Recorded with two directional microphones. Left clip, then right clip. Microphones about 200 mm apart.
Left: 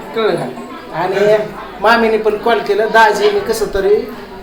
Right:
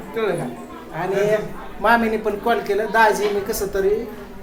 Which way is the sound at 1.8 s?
15° right (ahead or behind).